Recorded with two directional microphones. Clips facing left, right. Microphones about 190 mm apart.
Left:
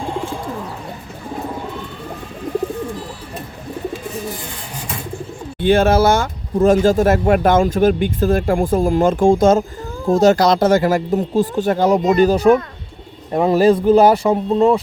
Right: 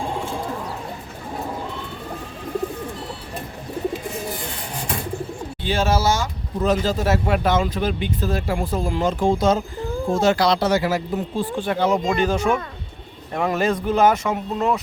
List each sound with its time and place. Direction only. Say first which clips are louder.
5.5 s speech: left 9 dB; 55° left (ahead or behind); by 14.8 s 30° left (ahead or behind)